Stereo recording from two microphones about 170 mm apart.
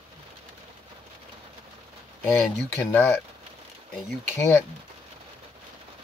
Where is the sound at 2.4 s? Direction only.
10° left (ahead or behind).